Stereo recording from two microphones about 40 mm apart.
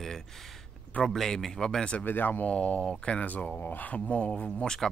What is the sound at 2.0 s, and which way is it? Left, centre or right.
Speech, left.